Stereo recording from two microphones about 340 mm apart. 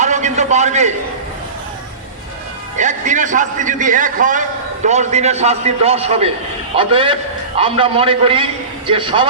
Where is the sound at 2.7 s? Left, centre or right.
Right.